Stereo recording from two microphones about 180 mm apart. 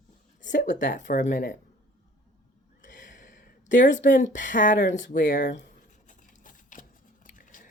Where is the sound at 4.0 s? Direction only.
45° left (ahead or behind).